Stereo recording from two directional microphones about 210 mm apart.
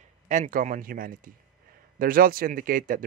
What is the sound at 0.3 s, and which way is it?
Speech, 40° right (ahead or behind).